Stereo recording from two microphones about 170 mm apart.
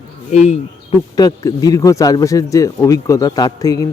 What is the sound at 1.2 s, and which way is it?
Speech, 20° left (ahead or behind).